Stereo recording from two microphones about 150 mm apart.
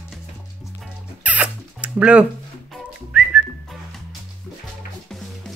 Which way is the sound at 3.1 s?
10° right (ahead or behind).